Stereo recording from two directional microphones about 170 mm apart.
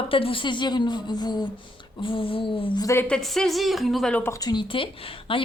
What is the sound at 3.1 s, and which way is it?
A woman's voice, 5° left (ahead or behind).